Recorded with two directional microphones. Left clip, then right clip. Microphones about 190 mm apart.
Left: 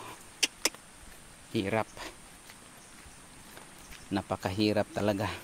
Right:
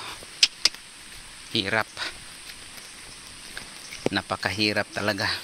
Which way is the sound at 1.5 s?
10° left (ahead or behind).